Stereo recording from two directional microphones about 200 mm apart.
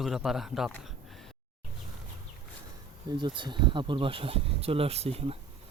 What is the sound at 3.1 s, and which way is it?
Speech, 25° right (ahead or behind).